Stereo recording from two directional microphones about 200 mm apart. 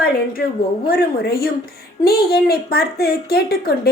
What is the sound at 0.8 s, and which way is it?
Speech, 50° left (ahead or behind).